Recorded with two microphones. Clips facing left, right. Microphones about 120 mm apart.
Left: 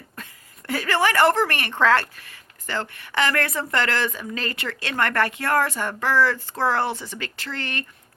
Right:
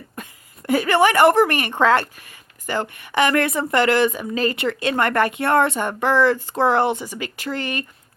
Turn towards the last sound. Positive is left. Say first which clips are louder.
# right 6 dB
turn(degrees=-15)  # may be behind; listen again after turning